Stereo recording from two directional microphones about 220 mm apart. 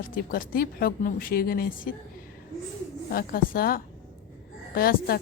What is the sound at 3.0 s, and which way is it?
A woman's voice, 40° left (ahead or behind).